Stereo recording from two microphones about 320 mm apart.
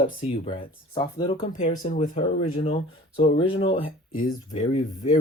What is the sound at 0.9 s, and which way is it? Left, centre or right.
Speech, centre.